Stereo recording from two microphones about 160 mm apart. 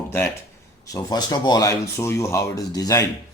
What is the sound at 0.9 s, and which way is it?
Speech, 25° left (ahead or behind).